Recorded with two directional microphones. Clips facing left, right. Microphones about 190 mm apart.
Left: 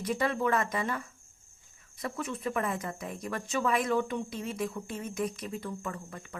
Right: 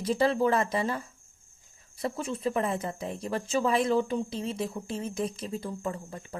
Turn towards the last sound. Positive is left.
turn(degrees=-30)  # may be behind; listen again after turning